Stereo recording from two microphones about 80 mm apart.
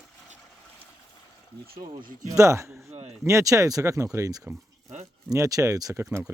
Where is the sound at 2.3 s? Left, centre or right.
Right.